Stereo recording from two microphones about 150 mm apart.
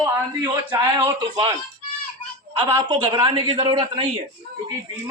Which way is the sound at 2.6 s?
30° right (ahead or behind).